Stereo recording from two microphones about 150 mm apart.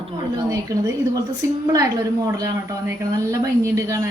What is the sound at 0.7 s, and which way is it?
A woman's voice, 25° right (ahead or behind).